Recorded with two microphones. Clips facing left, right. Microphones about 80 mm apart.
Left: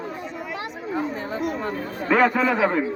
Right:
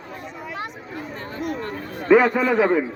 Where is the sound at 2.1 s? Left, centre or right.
Centre.